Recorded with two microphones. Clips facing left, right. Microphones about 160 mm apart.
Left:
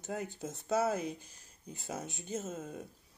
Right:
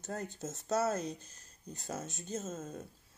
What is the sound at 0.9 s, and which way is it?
Speech, 15° left (ahead or behind).